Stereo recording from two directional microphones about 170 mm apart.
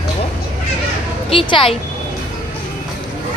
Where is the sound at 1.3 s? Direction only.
30° left (ahead or behind).